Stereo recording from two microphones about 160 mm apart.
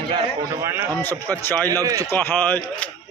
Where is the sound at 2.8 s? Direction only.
10° left (ahead or behind).